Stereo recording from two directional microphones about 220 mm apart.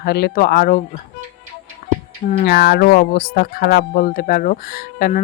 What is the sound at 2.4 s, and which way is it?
Speech, 40° left (ahead or behind).